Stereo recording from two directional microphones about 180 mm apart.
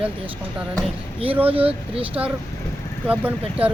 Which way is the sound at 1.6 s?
30° right (ahead or behind).